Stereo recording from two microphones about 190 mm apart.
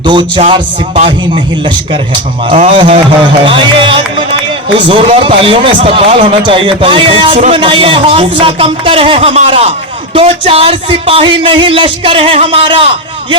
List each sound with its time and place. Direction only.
0.0 s speech: 25° right (ahead or behind)
2.5 s speech: 25° right (ahead or behind)